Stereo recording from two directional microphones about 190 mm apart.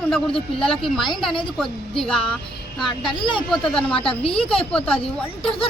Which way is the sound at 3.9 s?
30° left (ahead or behind).